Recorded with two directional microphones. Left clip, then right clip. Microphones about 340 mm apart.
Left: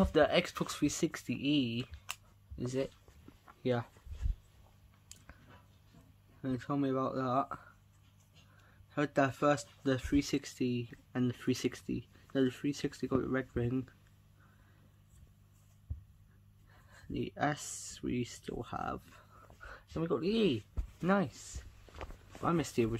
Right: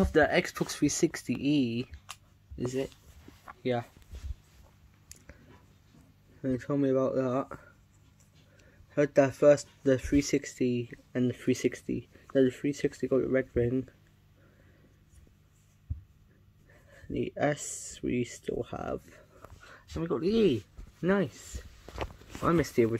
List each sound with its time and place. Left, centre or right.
0.0 s speech: centre
3.6 s speech: centre
6.4 s speech: centre
8.9 s speech: centre
17.1 s speech: centre
22.4 s speech: centre